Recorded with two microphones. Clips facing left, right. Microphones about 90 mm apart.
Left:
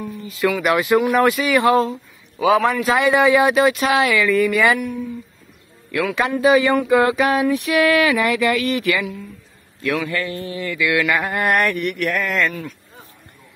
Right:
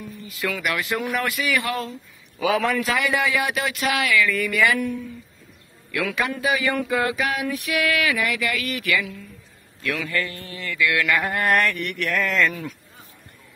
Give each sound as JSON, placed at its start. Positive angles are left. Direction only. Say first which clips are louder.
{"t": 0.5, "sound": "a man's voice", "louder": "left 9 dB", "side_deg": 20}
{"t": 5.9, "sound": "a man's voice", "louder": "left 5 dB", "side_deg": 30}
{"t": 9.9, "sound": "a sound", "louder": "left 4 dB", "side_deg": 20}